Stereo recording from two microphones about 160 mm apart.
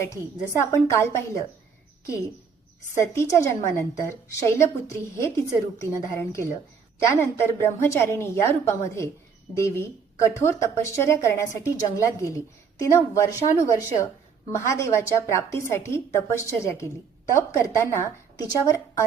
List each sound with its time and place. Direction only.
0.6 s speech: 15° left (ahead or behind)
3.0 s a woman's voice: 15° left (ahead or behind)